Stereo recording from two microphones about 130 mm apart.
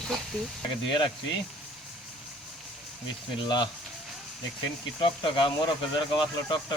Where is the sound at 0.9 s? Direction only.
40° left (ahead or behind).